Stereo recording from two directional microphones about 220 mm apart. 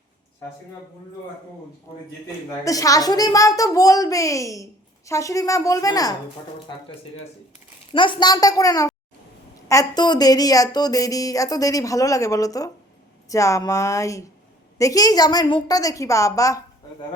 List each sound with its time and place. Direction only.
2.6 s a woman's voice: 15° left (ahead or behind)
7.9 s a woman's voice: 20° left (ahead or behind)